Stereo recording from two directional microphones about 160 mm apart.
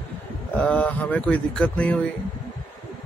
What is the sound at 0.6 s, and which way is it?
Speech, 10° left (ahead or behind).